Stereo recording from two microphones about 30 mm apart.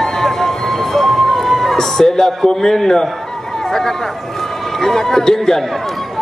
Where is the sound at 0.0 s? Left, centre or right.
Centre.